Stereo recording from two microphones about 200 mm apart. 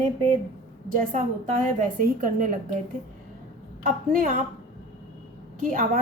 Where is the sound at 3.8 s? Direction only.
45° right (ahead or behind).